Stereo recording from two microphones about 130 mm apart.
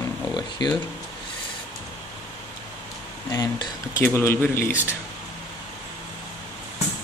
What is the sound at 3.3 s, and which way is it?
Speech, 25° left (ahead or behind).